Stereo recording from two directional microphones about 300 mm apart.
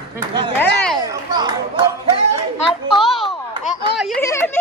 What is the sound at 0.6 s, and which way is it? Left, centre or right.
Speech, centre.